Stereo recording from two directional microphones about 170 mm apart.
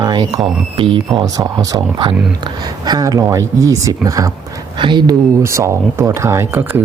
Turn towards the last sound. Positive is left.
turn(degrees=-10)  # may be behind; listen again after turning